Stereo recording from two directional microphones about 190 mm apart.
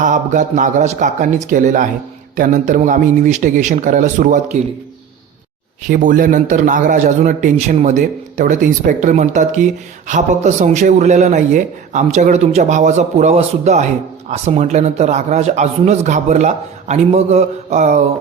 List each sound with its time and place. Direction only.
0.0 s a man's voice: 40° right (ahead or behind)
5.9 s a man's voice: 45° right (ahead or behind)